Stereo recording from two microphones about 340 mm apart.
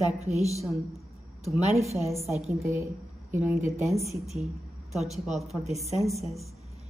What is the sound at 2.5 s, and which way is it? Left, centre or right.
A woman's voice, centre.